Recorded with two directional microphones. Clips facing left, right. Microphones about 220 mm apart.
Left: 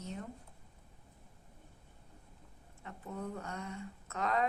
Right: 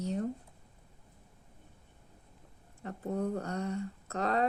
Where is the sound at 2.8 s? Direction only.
40° right (ahead or behind).